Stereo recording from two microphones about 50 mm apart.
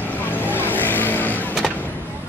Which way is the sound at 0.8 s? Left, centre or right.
Left.